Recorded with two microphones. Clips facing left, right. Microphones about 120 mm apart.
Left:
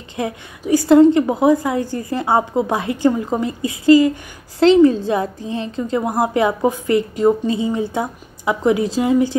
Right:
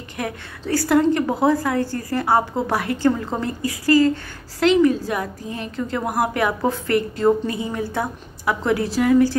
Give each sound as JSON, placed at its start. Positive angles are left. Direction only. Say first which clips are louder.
{"t": 0.2, "sound": "a woman's voice", "louder": "left 4 dB", "side_deg": 20}
{"t": 4.6, "sound": "a woman's voice", "louder": "left 5 dB", "side_deg": 30}